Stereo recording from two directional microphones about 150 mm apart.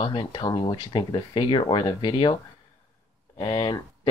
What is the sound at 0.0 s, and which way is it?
Speech, 35° left (ahead or behind).